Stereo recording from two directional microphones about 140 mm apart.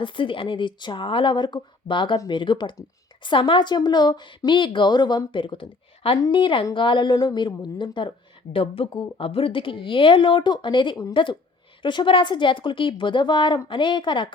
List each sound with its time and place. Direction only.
0.0 s a woman's voice: 35° left (ahead or behind)